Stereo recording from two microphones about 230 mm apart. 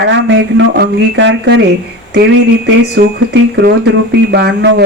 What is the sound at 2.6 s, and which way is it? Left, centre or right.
Speech, right.